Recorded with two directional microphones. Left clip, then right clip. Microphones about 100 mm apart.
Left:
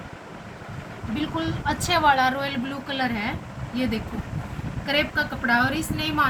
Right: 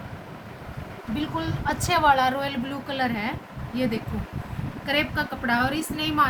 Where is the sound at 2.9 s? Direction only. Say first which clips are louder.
Even; 30° right (ahead or behind).